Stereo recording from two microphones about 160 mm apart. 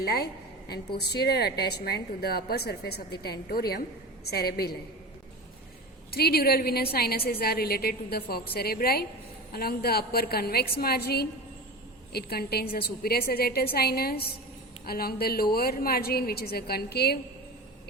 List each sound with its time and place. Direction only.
0.0 s a woman's voice: 75° left (ahead or behind)
0.9 s a woman's voice: 90° left; by 4.8 s 75° left (ahead or behind)
6.1 s a woman's voice: 75° left (ahead or behind)